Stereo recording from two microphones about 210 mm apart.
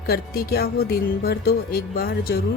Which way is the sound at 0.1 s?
45° left (ahead or behind).